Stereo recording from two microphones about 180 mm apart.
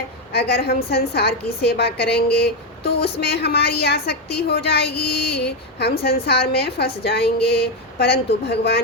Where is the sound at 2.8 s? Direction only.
30° left (ahead or behind).